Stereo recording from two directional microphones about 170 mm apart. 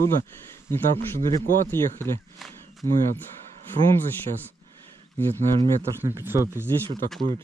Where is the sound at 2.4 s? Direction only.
Centre (ahead or behind).